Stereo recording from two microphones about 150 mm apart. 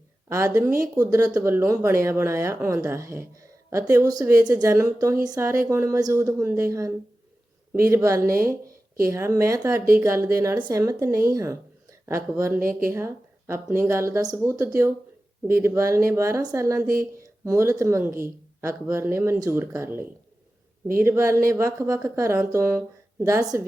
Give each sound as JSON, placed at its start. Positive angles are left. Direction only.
{"t": 0.3, "sound": "speech", "side_deg": -20}
{"t": 8.2, "sound": "speech", "side_deg": -75}
{"t": 9.0, "sound": "speech", "side_deg": -20}